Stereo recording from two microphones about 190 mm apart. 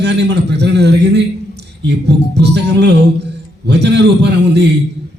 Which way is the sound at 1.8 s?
60° right (ahead or behind).